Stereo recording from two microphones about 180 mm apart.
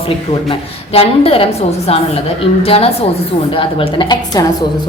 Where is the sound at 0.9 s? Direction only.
30° left (ahead or behind).